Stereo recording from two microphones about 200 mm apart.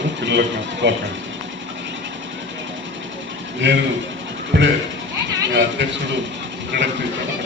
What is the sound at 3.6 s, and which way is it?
Speech, 65° right (ahead or behind).